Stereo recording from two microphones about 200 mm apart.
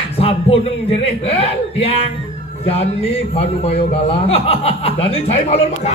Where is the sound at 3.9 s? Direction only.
30° left (ahead or behind).